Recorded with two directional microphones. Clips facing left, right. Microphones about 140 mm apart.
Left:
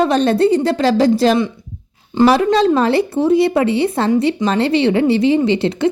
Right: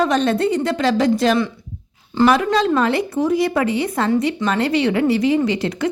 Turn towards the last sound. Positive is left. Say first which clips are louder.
# left 4 dB
turn(degrees=25)  # may be behind; listen again after turning